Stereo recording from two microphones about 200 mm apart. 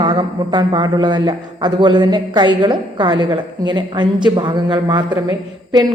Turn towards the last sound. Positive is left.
turn(degrees=-20)  # may be behind; listen again after turning